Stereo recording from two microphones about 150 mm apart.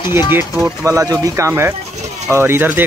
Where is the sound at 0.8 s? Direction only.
20° right (ahead or behind).